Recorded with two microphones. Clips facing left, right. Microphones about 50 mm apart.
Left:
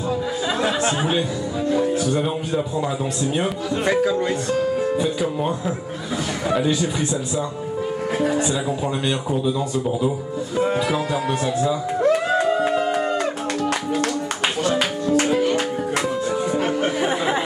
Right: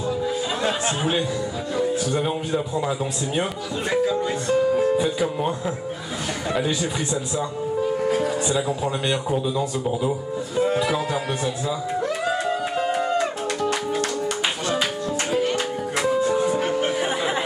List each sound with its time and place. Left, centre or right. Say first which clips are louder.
0.8 s speech: left 2 dB; centre
2.2 s speech: left 1 dB; centre
3.8 s speech: left 2 dB; left
4.5 s speech: right 2 dB; centre
6.5 s speech: left 4 dB; centre
8.1 s speech: left 1 dB; left
8.4 s speech: left 1 dB; centre
16.2 s music: right 2 dB; centre